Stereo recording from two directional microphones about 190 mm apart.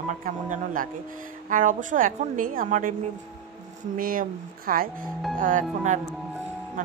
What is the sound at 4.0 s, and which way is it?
Speech, 50° right (ahead or behind).